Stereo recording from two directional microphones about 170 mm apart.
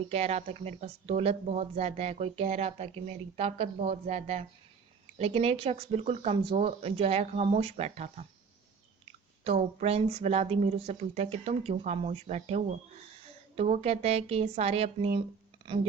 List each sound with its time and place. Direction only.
0.1 s speech: 40° right (ahead or behind)
9.4 s speech: 35° right (ahead or behind)